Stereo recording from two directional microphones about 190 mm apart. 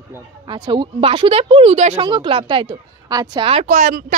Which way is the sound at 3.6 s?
45° right (ahead or behind).